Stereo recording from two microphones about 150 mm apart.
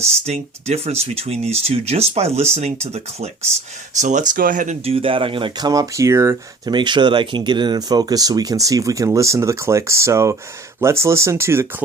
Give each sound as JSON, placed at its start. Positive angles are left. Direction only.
{"t": 0.0, "sound": "speech", "side_deg": -45}
{"t": 4.0, "sound": "speech", "side_deg": -55}
{"t": 4.9, "sound": "speech", "side_deg": -35}
{"t": 6.7, "sound": "speech", "side_deg": -30}